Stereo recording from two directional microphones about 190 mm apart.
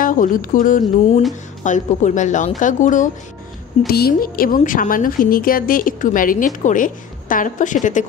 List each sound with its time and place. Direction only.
0.0 s a woman's voice: 45° left (ahead or behind)
3.8 s a woman's voice: 55° left (ahead or behind)